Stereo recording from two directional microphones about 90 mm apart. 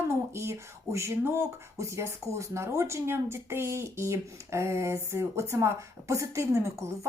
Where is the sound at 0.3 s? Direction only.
30° right (ahead or behind).